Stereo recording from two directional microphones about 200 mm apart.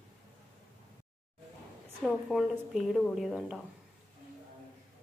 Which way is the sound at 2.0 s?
Centre (ahead or behind).